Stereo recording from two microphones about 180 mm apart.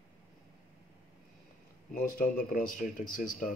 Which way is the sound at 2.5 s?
50° left (ahead or behind).